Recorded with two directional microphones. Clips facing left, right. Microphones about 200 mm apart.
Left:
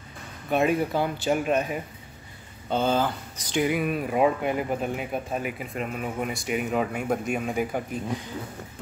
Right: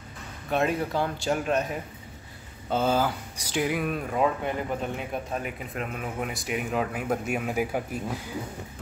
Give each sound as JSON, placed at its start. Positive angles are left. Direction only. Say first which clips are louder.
{"t": 0.5, "sound": "speech", "louder": "left 3 dB", "side_deg": 5}
{"t": 2.7, "sound": "speech", "louder": "left 1 dB", "side_deg": -5}
{"t": 4.1, "sound": "speech", "louder": "left 4 dB", "side_deg": 15}